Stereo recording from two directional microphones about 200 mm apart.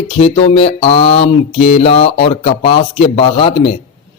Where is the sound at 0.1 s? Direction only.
30° left (ahead or behind).